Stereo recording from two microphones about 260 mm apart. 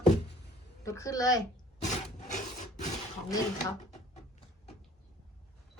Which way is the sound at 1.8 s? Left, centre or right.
Left.